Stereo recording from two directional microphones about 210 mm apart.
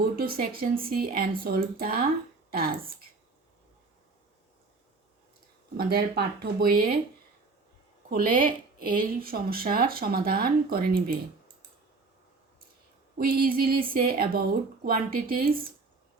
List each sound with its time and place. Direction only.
0.0 s speech: 45° right (ahead or behind)
5.7 s speech: 45° right (ahead or behind)
8.1 s speech: 40° right (ahead or behind)
13.1 s speech: 45° right (ahead or behind)